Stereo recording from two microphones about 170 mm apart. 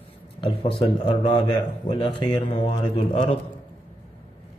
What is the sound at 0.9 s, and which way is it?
Speech, 30° left (ahead or behind).